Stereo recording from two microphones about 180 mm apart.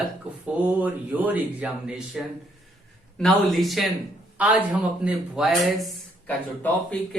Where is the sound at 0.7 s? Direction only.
10° right (ahead or behind).